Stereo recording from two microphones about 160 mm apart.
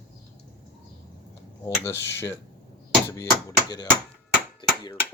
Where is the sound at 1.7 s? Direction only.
15° left (ahead or behind).